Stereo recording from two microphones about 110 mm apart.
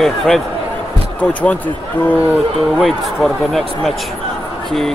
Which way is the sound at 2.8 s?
Centre (ahead or behind).